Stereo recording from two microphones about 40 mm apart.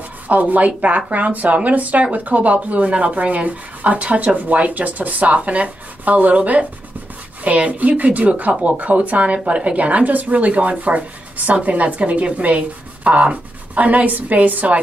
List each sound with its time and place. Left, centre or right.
0.3 s speech: right